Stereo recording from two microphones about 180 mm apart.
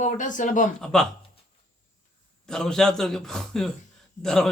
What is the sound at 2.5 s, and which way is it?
A man's voice, 5° left (ahead or behind).